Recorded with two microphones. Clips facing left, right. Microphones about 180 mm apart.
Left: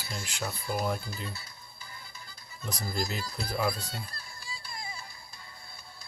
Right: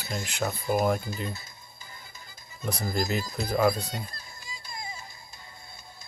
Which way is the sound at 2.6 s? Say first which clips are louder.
Right 5 dB; 55° right (ahead or behind).